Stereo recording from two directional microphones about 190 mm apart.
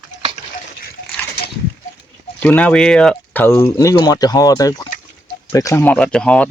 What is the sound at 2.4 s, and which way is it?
Speech, 10° left (ahead or behind).